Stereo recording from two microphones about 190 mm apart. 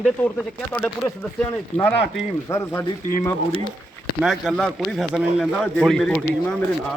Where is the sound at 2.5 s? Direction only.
15° left (ahead or behind).